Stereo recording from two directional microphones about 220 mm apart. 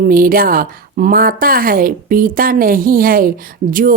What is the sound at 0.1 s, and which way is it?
A woman's voice, 40° right (ahead or behind).